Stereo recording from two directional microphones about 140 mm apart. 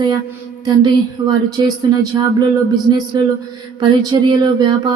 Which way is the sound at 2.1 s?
30° right (ahead or behind).